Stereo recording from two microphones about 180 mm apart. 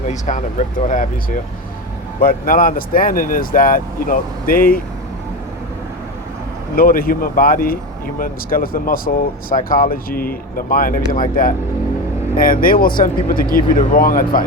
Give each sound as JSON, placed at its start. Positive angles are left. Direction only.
{"t": 0.1, "sound": "speech", "side_deg": 40}
{"t": 6.7, "sound": "speech", "side_deg": 55}